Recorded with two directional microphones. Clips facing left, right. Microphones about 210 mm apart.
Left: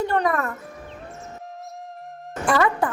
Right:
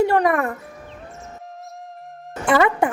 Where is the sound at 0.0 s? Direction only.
70° right (ahead or behind).